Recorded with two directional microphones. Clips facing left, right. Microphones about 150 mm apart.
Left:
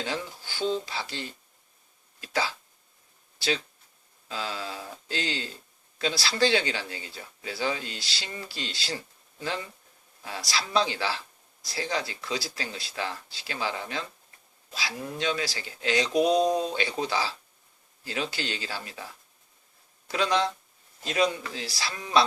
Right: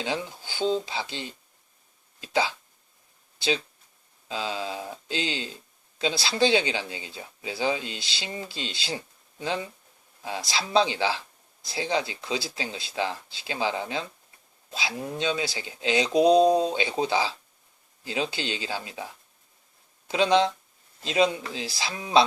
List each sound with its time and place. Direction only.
0.0 s speech: 15° right (ahead or behind)
20.1 s speech: 20° right (ahead or behind)